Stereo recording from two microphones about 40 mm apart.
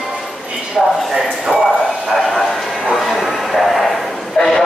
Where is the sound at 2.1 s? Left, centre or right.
Centre.